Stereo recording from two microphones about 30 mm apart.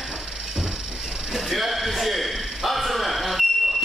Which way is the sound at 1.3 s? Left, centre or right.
Centre.